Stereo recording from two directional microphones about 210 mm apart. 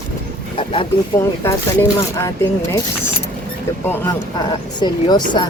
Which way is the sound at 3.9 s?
15° left (ahead or behind).